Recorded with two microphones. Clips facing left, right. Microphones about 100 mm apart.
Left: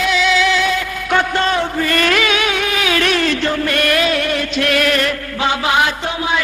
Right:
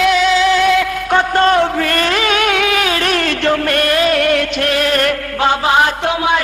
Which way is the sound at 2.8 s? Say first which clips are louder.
Even; 40° right (ahead or behind).